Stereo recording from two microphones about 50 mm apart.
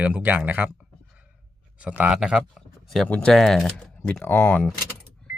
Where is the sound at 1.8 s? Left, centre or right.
Right.